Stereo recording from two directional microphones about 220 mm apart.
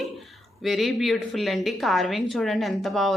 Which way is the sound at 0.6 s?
Centre (ahead or behind).